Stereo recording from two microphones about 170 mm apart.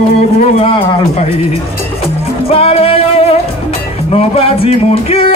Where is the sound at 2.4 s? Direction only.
35° left (ahead or behind).